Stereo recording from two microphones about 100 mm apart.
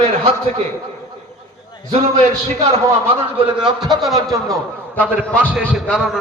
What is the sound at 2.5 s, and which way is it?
Speech, 90° right.